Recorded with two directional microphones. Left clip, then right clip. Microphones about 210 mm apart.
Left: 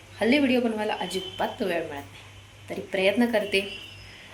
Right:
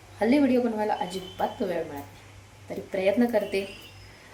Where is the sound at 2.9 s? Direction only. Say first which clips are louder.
Left 1 dB; 5° right (ahead or behind).